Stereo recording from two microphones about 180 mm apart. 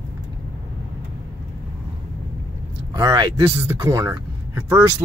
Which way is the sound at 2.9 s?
20° right (ahead or behind).